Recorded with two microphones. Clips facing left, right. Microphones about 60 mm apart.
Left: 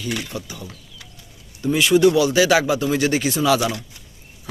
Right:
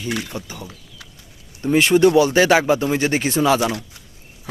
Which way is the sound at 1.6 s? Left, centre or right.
Right.